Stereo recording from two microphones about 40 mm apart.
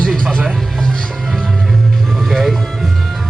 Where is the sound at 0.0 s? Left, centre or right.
Centre.